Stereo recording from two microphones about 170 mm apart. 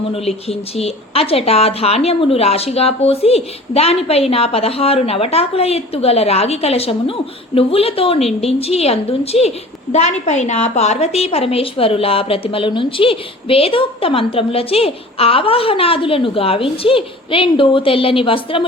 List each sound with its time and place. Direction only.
0.1 s a woman's voice: 35° left (ahead or behind)